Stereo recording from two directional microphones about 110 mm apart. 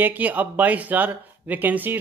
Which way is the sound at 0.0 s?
15° right (ahead or behind).